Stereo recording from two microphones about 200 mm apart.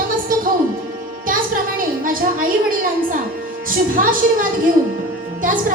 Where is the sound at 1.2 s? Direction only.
45° right (ahead or behind).